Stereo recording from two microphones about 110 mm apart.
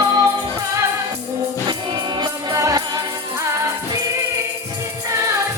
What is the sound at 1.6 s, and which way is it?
Music, 40° right (ahead or behind).